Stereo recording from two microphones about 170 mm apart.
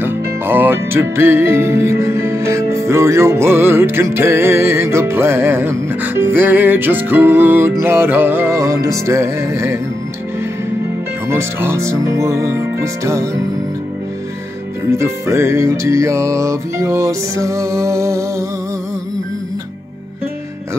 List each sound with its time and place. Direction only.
0.0 s music: 10° right (ahead or behind)
11.2 s music: 15° right (ahead or behind)
14.9 s music: 15° right (ahead or behind)